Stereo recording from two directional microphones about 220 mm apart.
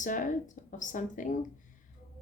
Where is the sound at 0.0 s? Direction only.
35° left (ahead or behind).